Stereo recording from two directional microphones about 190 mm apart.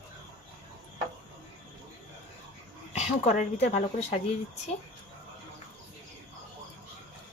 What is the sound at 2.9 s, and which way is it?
Speech, 35° left (ahead or behind).